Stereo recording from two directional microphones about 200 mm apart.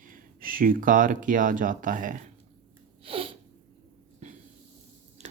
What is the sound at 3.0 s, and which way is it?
Sneeze, 25° right (ahead or behind).